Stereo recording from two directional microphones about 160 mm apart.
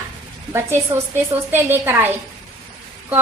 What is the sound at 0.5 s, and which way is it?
A woman's voice, 15° right (ahead or behind).